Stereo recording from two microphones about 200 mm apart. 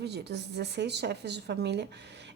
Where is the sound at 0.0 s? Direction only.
55° right (ahead or behind).